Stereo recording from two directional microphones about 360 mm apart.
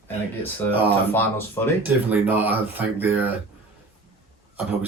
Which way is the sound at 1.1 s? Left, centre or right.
Centre.